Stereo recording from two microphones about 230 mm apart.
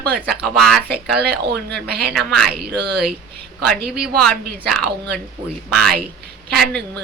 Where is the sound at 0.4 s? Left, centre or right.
Centre.